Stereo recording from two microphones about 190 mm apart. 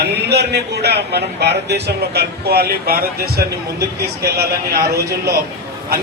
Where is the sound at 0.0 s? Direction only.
60° right (ahead or behind).